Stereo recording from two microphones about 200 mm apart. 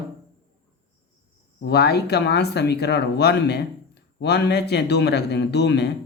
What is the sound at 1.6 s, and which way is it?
Speech, 55° left (ahead or behind).